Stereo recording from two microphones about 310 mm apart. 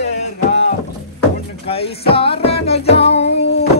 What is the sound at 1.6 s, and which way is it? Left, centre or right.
Speech, centre.